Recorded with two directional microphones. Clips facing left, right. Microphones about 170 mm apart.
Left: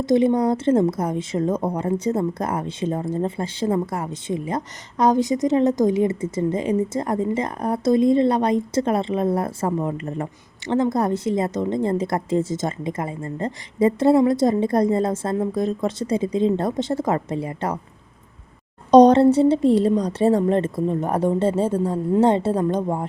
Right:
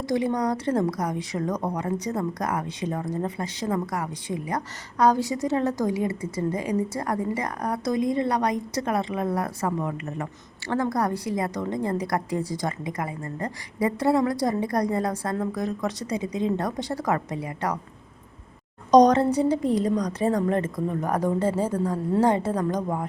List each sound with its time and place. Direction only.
0.0 s a woman's voice: 25° left (ahead or behind)
18.9 s a woman's voice: 30° left (ahead or behind)